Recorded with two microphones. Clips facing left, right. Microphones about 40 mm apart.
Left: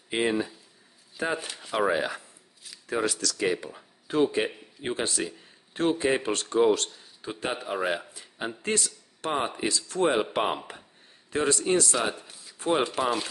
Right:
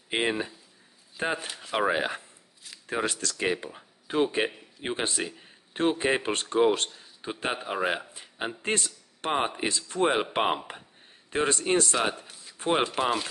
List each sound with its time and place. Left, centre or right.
0.1 s speech: right
3.6 s speech: right
11.3 s speech: right